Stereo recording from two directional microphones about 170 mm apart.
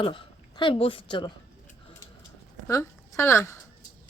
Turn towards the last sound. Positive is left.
turn(degrees=15)  # may be behind; listen again after turning